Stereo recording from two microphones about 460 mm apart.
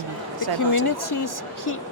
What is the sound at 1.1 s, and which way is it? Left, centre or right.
Speech, left.